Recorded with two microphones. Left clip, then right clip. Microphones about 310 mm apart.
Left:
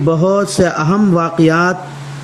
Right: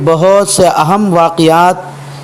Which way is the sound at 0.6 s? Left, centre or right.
Right.